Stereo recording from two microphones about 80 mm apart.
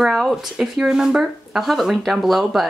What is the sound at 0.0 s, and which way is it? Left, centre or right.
Speech, centre.